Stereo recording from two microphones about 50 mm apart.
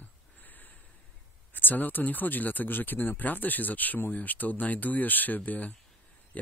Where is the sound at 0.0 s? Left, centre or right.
Left.